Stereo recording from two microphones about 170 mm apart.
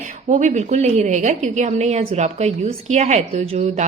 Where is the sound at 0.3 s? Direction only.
45° right (ahead or behind).